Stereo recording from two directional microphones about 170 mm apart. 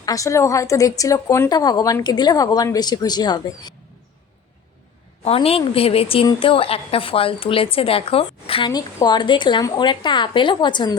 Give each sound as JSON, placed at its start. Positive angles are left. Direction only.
{"t": 0.0, "sound": "a woman's voice", "side_deg": 20}
{"t": 5.2, "sound": "a woman's voice", "side_deg": 35}